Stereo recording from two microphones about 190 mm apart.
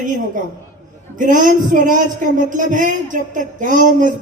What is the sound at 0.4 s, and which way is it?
Speech, 45° right (ahead or behind).